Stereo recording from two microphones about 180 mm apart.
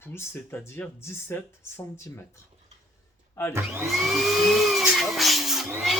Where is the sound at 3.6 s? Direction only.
15° right (ahead or behind).